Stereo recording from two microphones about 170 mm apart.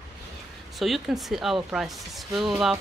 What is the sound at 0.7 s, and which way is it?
A woman's voice, centre (ahead or behind).